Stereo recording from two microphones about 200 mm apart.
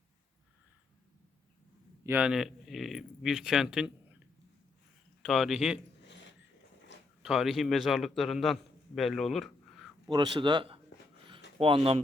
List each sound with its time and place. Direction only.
2.0 s speech: 5° right (ahead or behind)
5.2 s speech: centre (ahead or behind)
7.2 s speech: centre (ahead or behind)
10.1 s speech: 25° right (ahead or behind)
11.3 s a sound: 25° right (ahead or behind)